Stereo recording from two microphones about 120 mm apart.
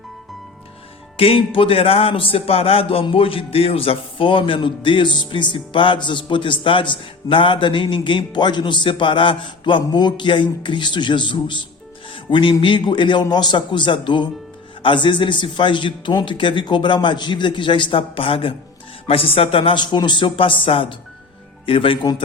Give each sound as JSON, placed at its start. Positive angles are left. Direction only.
{"t": 1.1, "sound": "a man's voice", "side_deg": 50}